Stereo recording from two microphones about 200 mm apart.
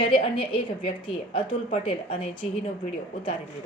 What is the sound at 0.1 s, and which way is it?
A woman's voice, 25° left (ahead or behind).